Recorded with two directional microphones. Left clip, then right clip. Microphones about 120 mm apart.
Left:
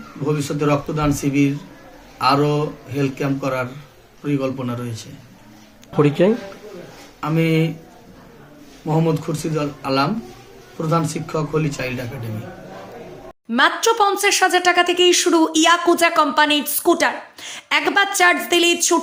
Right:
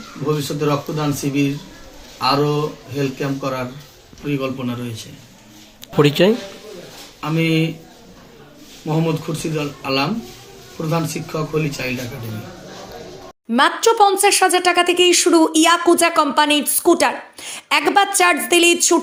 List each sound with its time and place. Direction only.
0.6 s speech: 25° left (ahead or behind)
6.0 s speech: 5° right (ahead or behind)
7.2 s speech: 15° left (ahead or behind)
8.9 s speech: 15° left (ahead or behind)
13.6 s speech: 5° right (ahead or behind)